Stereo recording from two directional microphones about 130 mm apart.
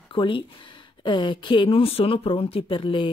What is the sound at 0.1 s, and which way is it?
Speech, 40° left (ahead or behind).